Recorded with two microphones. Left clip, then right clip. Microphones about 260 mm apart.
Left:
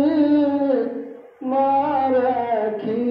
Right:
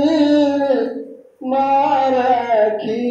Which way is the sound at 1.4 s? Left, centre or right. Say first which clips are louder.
Right 4 dB; right.